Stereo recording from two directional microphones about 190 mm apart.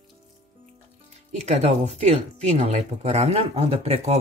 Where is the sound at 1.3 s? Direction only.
35° right (ahead or behind).